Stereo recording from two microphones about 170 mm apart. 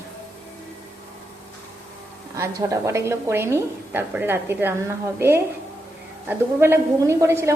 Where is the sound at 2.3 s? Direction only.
15° right (ahead or behind).